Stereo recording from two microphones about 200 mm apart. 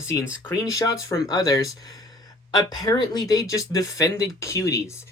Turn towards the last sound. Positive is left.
turn(degrees=15)  # may be behind; listen again after turning